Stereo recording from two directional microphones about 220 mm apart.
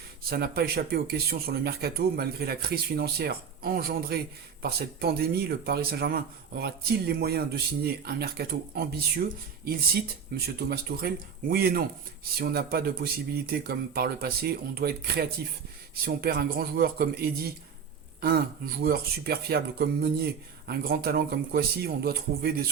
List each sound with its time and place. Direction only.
0.3 s speech: 45° right (ahead or behind)